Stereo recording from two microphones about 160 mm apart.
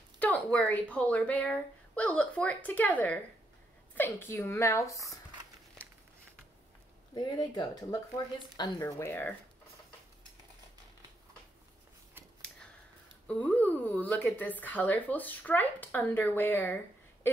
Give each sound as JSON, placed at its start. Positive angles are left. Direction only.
{"t": 0.2, "sound": "speech", "side_deg": 10}
{"t": 7.2, "sound": "speech", "side_deg": 25}
{"t": 13.3, "sound": "speech", "side_deg": 10}